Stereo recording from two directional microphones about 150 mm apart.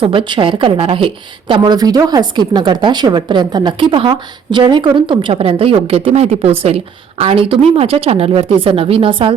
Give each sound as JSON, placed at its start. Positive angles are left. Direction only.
{"t": 0.0, "sound": "a woman's voice", "side_deg": -35}